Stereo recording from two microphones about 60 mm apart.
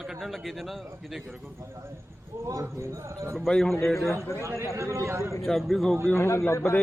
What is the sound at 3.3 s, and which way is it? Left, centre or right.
Speech, centre.